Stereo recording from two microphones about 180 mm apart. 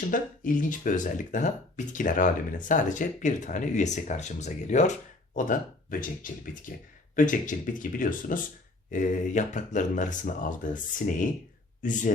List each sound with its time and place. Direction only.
0.1 s speech: 50° left (ahead or behind)